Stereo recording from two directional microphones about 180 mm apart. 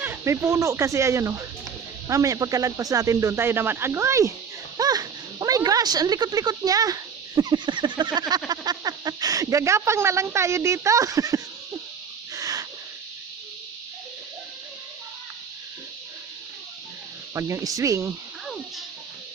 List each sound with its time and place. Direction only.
0.0 s speech: 15° right (ahead or behind)
12.3 s owl: 20° right (ahead or behind)
17.3 s speech: 15° right (ahead or behind)